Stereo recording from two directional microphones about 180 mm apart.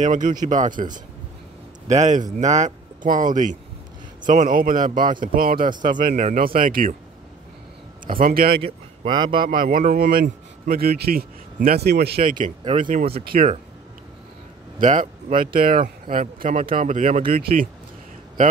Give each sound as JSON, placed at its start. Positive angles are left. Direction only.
{"t": 0.0, "sound": "speech", "side_deg": -45}
{"t": 8.2, "sound": "speech", "side_deg": -55}
{"t": 8.5, "sound": "speech", "side_deg": -30}
{"t": 9.5, "sound": "speech", "side_deg": -50}
{"t": 12.4, "sound": "speech", "side_deg": -30}
{"t": 12.8, "sound": "speech", "side_deg": -45}
{"t": 14.8, "sound": "speech", "side_deg": -45}
{"t": 17.3, "sound": "speech", "side_deg": -55}